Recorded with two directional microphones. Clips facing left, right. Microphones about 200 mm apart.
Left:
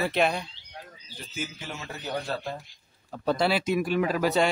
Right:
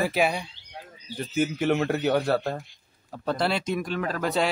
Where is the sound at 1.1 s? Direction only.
60° right (ahead or behind).